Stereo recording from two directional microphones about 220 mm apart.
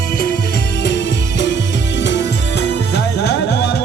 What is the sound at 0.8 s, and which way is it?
Music, 50° left (ahead or behind).